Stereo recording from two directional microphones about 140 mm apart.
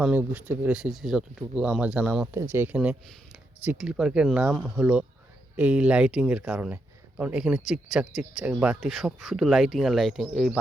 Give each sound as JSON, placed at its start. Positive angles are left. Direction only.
{"t": 0.0, "sound": "speech", "side_deg": -10}
{"t": 2.3, "sound": "speech", "side_deg": -15}